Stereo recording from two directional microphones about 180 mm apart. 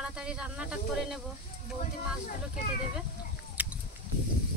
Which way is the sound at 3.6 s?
10° right (ahead or behind).